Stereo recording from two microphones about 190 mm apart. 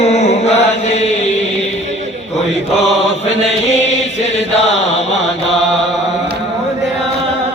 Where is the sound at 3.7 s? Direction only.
35° left (ahead or behind).